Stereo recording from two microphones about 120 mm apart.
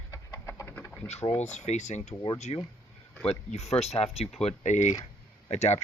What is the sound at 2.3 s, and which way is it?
Speech, 70° left (ahead or behind).